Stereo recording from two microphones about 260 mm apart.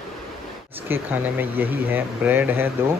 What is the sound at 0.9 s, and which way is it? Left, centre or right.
Speech, centre.